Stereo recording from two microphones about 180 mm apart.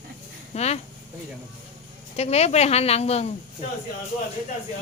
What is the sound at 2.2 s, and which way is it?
Speech, 35° left (ahead or behind).